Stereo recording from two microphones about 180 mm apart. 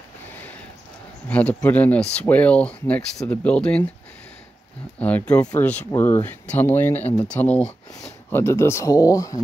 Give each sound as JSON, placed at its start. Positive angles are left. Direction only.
{"t": 1.3, "sound": "speech", "side_deg": 10}
{"t": 4.9, "sound": "speech", "side_deg": 5}